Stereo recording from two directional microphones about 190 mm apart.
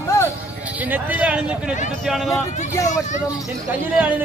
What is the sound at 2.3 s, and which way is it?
Vehicle, 15° left (ahead or behind).